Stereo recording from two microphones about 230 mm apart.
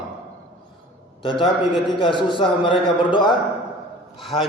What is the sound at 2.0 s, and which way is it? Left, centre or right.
A man's voice, left.